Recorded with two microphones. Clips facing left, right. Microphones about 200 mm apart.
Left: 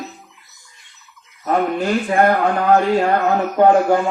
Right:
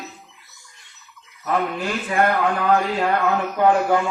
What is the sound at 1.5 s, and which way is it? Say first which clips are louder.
Speech: left 5 dB; 40° left (ahead or behind).